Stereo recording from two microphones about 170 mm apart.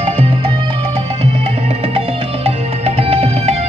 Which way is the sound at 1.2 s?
35° right (ahead or behind).